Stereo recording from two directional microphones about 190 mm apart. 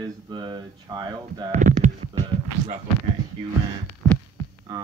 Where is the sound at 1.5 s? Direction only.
40° right (ahead or behind).